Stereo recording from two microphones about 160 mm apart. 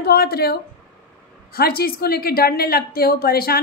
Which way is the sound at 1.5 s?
70° left (ahead or behind).